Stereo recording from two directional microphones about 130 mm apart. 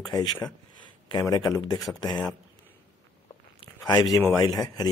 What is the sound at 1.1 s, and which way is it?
Speech, 30° left (ahead or behind).